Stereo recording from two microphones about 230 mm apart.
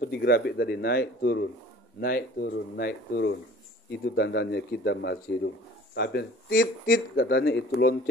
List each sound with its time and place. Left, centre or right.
0.0 s speech: left